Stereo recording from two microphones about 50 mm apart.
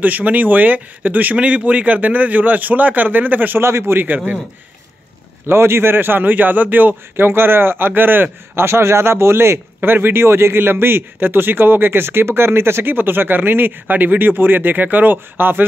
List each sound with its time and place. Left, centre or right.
0.0 s speech: right
3.6 s a man's voice: right
4.0 s speech: right
5.5 s a man's voice: right
9.8 s a man's voice: right